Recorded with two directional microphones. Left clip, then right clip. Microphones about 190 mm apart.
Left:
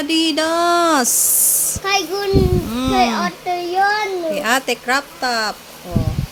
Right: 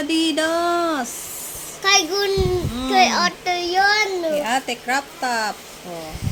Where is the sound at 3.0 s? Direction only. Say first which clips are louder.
Right 3 dB; 20° right (ahead or behind).